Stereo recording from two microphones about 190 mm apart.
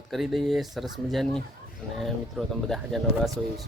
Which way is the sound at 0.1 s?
Centre (ahead or behind).